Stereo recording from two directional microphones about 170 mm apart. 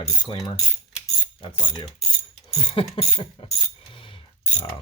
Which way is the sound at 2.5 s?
30° left (ahead or behind).